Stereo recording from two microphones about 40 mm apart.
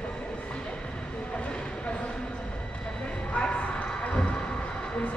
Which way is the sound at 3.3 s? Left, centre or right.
Left.